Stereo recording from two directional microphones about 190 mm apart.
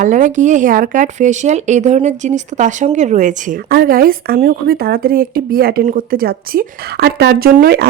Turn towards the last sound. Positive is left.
turn(degrees=-55)  # may be behind; listen again after turning